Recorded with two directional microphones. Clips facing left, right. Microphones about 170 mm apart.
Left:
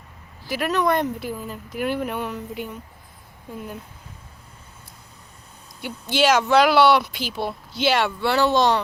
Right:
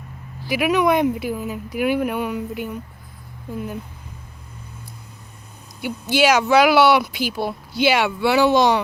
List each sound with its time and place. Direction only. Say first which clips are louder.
0.4 s speech: right 4 dB; 10° right (ahead or behind)
5.8 s speech: right 2 dB; 5° right (ahead or behind)